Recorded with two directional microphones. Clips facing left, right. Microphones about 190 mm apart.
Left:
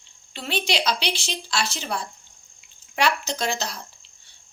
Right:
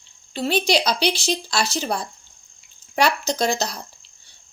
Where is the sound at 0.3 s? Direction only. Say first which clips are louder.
Right 6 dB; 40° right (ahead or behind).